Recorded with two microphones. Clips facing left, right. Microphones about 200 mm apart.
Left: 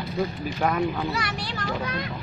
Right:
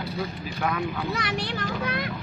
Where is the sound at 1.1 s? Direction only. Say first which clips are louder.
Right 2 dB; 55° right (ahead or behind).